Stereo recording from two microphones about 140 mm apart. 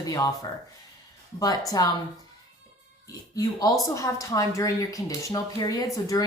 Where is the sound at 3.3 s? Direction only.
25° left (ahead or behind).